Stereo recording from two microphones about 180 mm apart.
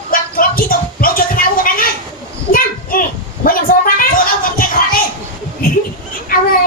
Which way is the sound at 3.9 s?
50° left (ahead or behind).